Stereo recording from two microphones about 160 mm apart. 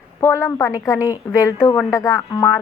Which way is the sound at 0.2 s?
15° left (ahead or behind).